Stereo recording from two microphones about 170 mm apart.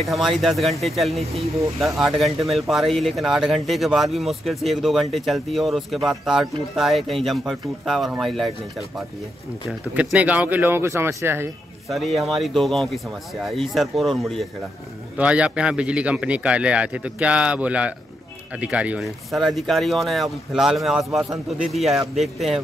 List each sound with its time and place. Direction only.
0.0 s speech: centre (ahead or behind)
1.2 s speech: 35° right (ahead or behind)
1.6 s a man's voice: centre (ahead or behind)
11.9 s a man's voice: centre (ahead or behind)